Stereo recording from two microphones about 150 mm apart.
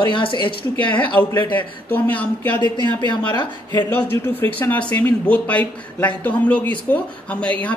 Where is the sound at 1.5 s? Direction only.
10° left (ahead or behind).